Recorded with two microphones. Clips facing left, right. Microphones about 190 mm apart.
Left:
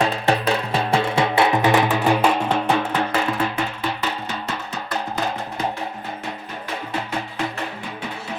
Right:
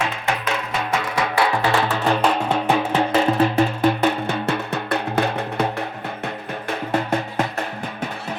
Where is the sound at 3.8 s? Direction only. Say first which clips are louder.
Right 8 dB; 55° right (ahead or behind).